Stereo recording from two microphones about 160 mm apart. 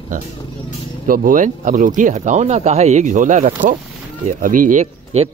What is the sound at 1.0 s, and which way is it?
Speech, 60° right (ahead or behind).